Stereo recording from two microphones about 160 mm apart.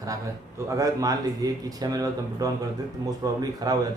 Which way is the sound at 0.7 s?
20° right (ahead or behind).